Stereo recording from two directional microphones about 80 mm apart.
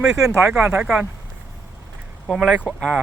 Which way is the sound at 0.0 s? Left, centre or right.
Centre.